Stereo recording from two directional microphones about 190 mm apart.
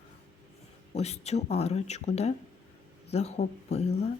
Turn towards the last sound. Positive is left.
turn(degrees=35)  # may be behind; listen again after turning